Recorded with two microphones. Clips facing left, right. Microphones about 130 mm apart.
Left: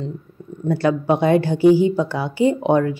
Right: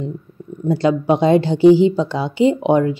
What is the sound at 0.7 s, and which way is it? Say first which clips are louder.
A woman's voice: right 2 dB; 20° right (ahead or behind).